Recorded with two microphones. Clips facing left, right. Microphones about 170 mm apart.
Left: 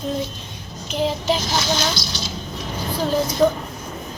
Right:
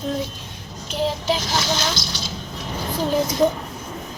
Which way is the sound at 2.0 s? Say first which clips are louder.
Left 1 dB; 50° right (ahead or behind).